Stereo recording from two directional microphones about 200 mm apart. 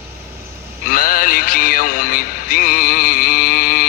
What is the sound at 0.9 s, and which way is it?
Music, 45° left (ahead or behind).